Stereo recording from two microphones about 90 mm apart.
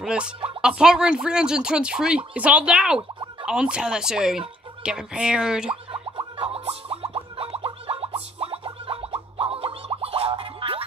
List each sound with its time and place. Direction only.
0.0 s speech: 10° right (ahead or behind)
5.9 s plop: 75° right (ahead or behind)